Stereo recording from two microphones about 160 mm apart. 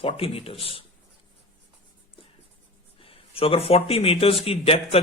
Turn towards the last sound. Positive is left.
turn(degrees=40)  # may be behind; listen again after turning